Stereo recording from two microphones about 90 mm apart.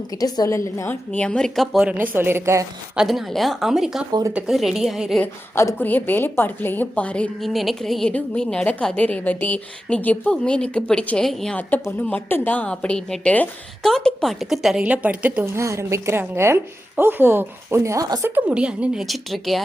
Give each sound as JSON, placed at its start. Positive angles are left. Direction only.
{"t": 0.2, "sound": "a woman's voice", "side_deg": 45}
{"t": 0.5, "sound": "a woman's voice", "side_deg": 35}
{"t": 0.9, "sound": "a woman's voice", "side_deg": 15}
{"t": 1.8, "sound": "speech", "side_deg": -20}
{"t": 2.9, "sound": "speech", "side_deg": -5}
{"t": 5.8, "sound": "a woman's voice", "side_deg": 20}
{"t": 7.4, "sound": "a woman's voice", "side_deg": 0}
{"t": 11.5, "sound": "a woman's voice", "side_deg": 20}
{"t": 14.8, "sound": "a woman's voice", "side_deg": -15}
{"t": 15.4, "sound": "a woman's voice", "side_deg": -30}
{"t": 18.2, "sound": "speech", "side_deg": -20}
{"t": 18.5, "sound": "a woman's voice", "side_deg": -10}
{"t": 19.0, "sound": "speech", "side_deg": 0}